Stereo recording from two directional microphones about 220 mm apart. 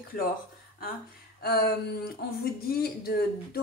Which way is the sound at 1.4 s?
45° left (ahead or behind).